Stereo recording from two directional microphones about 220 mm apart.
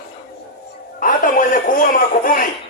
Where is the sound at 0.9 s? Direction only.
40° left (ahead or behind).